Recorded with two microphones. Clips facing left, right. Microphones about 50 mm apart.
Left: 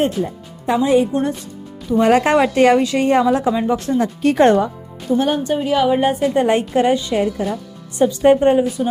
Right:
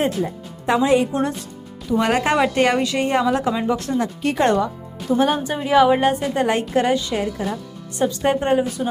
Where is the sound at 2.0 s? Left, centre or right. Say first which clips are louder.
Left 5 dB; left.